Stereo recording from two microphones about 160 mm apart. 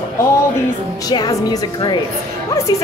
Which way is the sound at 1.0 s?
25° left (ahead or behind).